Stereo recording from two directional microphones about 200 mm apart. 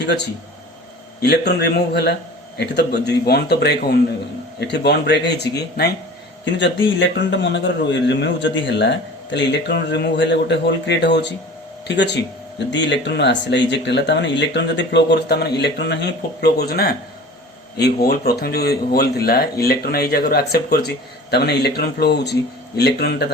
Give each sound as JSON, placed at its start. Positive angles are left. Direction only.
{"t": 1.2, "sound": "speech", "side_deg": 55}